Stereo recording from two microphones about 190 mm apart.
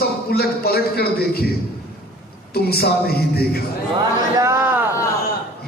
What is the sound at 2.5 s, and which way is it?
A man's voice, 55° left (ahead or behind).